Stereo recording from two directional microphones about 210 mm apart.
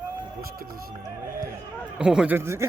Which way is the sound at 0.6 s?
45° right (ahead or behind).